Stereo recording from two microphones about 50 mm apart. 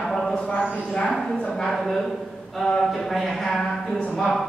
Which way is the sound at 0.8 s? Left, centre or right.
Centre.